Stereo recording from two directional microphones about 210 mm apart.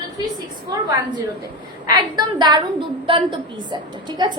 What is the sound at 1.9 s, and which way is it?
A woman's voice, 20° right (ahead or behind).